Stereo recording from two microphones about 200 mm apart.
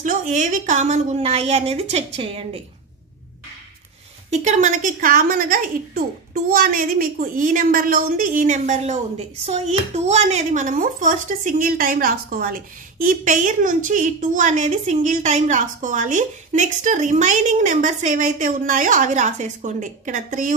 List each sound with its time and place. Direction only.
0.0 s speech: 40° right (ahead or behind)
4.3 s a woman's voice: 35° right (ahead or behind)